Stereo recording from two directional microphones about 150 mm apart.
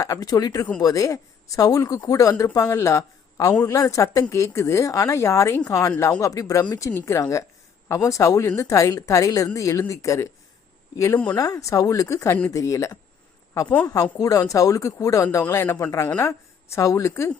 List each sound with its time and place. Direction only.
0.0 s a woman's voice: 25° left (ahead or behind)